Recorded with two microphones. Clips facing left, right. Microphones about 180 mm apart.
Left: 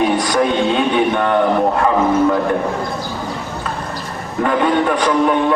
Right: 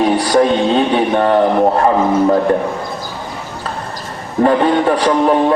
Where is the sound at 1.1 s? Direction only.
35° right (ahead or behind).